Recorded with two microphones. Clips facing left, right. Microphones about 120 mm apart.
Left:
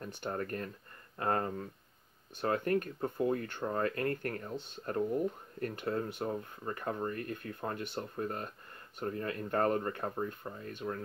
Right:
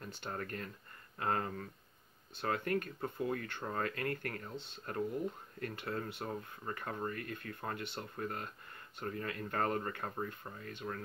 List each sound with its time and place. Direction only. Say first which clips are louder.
0.3 s speech: left 5 dB; 35° left (ahead or behind)